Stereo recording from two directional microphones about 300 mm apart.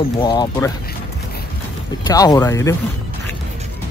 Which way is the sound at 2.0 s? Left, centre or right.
Centre.